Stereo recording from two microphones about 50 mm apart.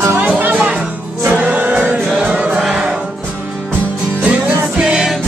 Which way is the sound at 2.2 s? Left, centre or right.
Right.